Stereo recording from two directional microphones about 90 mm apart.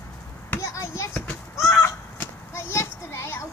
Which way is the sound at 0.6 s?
35° left (ahead or behind).